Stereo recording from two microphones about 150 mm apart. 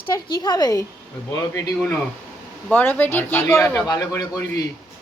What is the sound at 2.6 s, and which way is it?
A woman's voice, 10° left (ahead or behind).